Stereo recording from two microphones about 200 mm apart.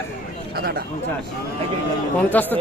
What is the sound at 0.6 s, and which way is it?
Speech, 50° right (ahead or behind).